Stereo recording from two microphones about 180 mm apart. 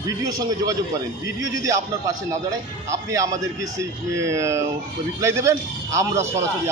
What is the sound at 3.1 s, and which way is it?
Speech, 20° right (ahead or behind).